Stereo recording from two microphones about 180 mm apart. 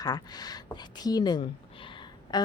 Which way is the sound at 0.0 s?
20° left (ahead or behind).